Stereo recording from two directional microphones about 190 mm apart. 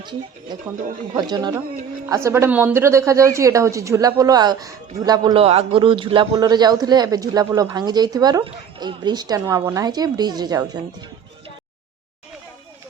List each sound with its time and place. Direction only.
1.1 s a woman's voice: 20° right (ahead or behind)